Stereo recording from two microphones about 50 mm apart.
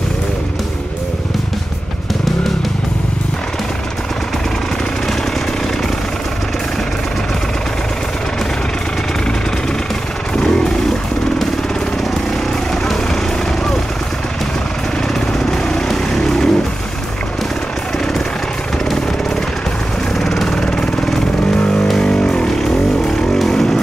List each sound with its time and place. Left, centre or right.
10.3 s vehicle: centre
15.1 s jackhammer: centre
20.2 s vehicle: centre